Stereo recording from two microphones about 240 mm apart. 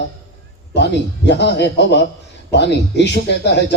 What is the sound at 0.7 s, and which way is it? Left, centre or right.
Speech, left.